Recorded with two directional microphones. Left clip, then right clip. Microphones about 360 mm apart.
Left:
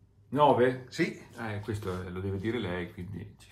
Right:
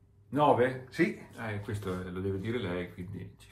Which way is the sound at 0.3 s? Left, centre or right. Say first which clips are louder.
Left 2 dB; left.